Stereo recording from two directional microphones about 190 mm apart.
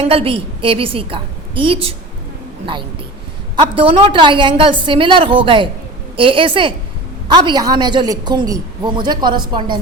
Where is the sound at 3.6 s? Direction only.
25° right (ahead or behind).